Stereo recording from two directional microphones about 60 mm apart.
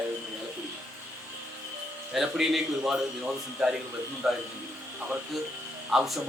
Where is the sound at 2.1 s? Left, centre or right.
Centre.